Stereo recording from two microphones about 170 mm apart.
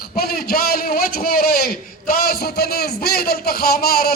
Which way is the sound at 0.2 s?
65° left (ahead or behind).